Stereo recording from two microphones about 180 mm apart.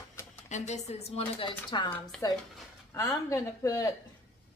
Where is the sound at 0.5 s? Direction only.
40° left (ahead or behind); by 3.9 s 20° left (ahead or behind).